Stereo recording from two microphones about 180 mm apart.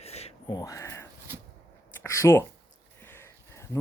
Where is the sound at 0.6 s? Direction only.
15° left (ahead or behind).